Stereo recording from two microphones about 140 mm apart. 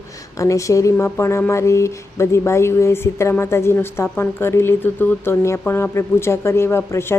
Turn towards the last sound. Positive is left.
turn(degrees=20)  # may be behind; listen again after turning